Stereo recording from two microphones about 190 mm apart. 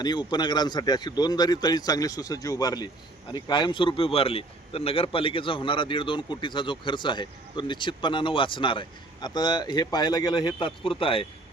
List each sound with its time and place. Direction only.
0.0 s speech: 25° left (ahead or behind)